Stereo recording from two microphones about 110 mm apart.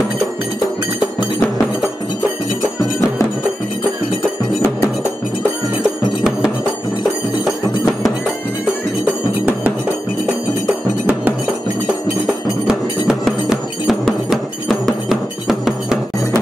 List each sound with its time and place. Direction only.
9.0 s cowbell: 15° right (ahead or behind)
12.6 s music: 5° right (ahead or behind)